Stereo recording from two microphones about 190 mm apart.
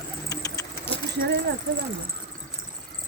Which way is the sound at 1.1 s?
60° right (ahead or behind).